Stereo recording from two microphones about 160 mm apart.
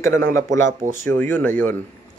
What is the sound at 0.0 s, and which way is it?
Speech, 15° left (ahead or behind).